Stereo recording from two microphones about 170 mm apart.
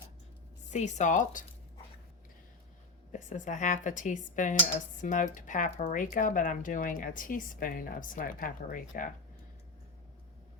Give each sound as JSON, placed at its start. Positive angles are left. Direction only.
{"t": 0.7, "sound": "speech", "side_deg": 45}
{"t": 3.1, "sound": "speech", "side_deg": 50}